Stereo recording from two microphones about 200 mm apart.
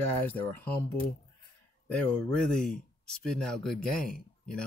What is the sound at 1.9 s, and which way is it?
Speech, 5° left (ahead or behind).